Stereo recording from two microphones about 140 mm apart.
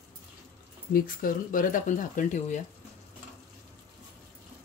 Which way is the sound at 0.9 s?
85° left.